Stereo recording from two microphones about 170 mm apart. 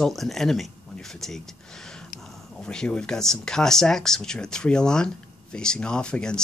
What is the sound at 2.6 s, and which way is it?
Speech, 5° left (ahead or behind).